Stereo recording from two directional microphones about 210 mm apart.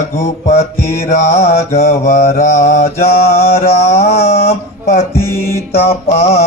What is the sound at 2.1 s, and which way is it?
Mantra, 40° left (ahead or behind).